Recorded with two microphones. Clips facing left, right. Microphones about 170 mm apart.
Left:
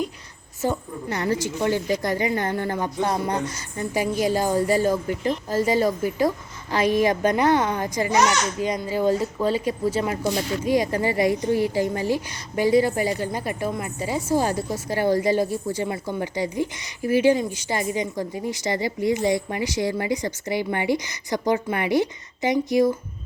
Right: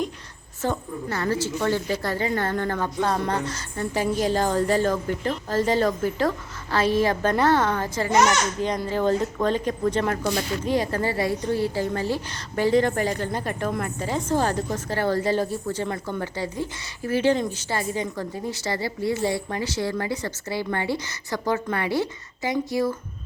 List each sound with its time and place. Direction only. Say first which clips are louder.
0.6 s speech: left 1 dB; 15° left (ahead or behind)